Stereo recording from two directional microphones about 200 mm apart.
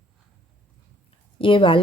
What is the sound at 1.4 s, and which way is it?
Speech, 25° left (ahead or behind).